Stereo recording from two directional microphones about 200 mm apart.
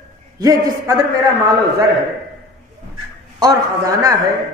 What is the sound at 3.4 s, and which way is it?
Speech, 20° right (ahead or behind).